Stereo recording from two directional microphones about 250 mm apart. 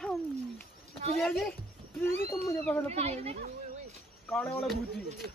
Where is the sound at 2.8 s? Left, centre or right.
Right.